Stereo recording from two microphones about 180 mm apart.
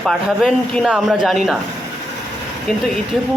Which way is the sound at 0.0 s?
Centre (ahead or behind).